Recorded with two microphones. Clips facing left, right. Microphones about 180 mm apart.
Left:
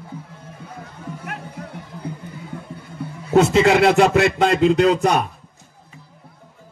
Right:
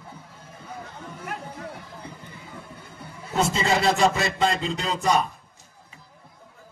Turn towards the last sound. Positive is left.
turn(degrees=60)  # may be behind; listen again after turning